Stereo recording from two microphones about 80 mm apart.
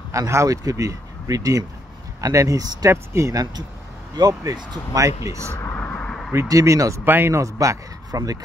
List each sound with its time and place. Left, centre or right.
0.1 s speech: right
2.9 s speech: right
4.1 s speech: right
5.8 s a sound: centre
6.3 s speech: right
7.1 s speech: right